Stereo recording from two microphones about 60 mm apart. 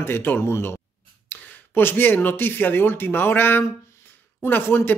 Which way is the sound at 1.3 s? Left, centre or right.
Left.